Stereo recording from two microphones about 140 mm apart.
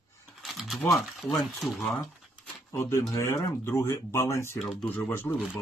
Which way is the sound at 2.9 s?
20° left (ahead or behind).